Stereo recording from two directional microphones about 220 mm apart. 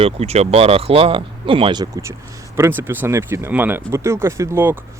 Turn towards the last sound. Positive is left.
turn(degrees=-10)  # may be behind; listen again after turning